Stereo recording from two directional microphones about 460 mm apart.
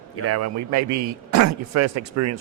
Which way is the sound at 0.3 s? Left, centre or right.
Right.